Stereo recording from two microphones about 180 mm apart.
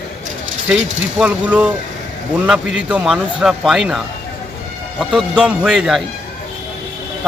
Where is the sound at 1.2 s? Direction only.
5° right (ahead or behind).